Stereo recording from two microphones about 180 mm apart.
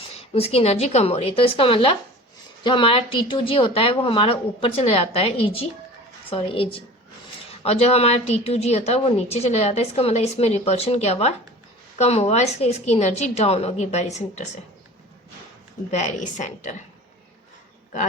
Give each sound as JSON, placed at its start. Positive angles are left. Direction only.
{"t": 0.2, "sound": "a woman's voice", "side_deg": 35}
{"t": 15.9, "sound": "a woman's voice", "side_deg": 40}